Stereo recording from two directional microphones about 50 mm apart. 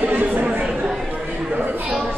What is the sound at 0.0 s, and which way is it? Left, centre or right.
Chatter, right.